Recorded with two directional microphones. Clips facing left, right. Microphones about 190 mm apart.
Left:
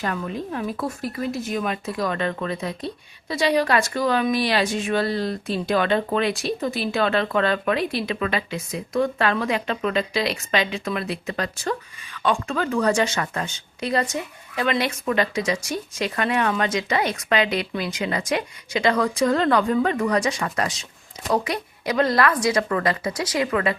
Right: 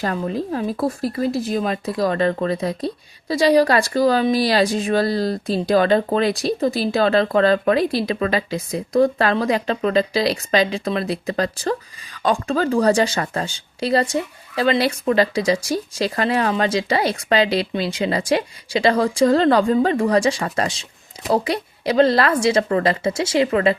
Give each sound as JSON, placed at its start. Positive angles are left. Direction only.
{"t": 0.0, "sound": "a woman's voice", "side_deg": -35}